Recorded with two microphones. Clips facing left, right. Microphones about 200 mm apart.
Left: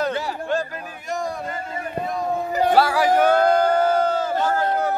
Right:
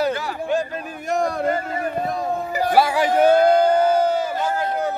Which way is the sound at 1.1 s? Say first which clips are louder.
Right 7 dB; 65° right (ahead or behind).